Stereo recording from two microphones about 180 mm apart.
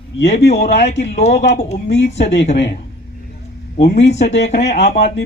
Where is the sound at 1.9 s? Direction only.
75° left (ahead or behind).